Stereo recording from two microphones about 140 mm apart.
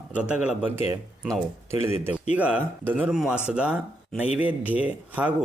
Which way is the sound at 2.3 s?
10° right (ahead or behind).